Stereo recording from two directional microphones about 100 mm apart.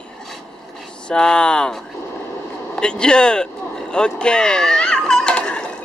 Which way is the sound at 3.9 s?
10° left (ahead or behind).